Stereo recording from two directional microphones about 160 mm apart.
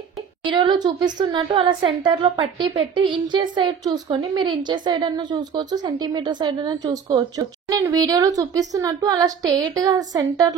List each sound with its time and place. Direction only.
0.5 s a woman's voice: 30° right (ahead or behind)